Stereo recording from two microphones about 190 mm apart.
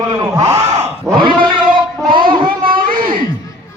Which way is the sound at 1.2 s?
25° right (ahead or behind).